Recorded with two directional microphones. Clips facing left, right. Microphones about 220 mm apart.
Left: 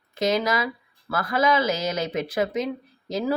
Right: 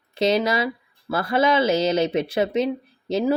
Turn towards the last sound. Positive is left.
turn(degrees=-25)  # may be behind; listen again after turning